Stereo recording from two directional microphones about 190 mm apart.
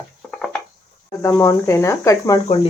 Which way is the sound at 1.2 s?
15° left (ahead or behind).